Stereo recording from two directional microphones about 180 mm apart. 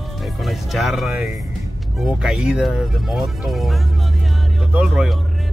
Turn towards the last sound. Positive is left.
turn(degrees=0)  # may be behind; listen again after turning